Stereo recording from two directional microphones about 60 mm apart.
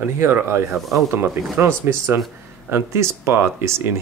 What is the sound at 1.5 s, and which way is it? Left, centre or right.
Speech, right.